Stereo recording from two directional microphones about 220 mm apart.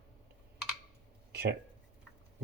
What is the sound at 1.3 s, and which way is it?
Speech, 45° right (ahead or behind).